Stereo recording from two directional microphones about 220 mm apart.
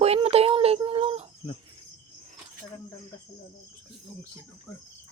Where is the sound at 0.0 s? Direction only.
30° right (ahead or behind).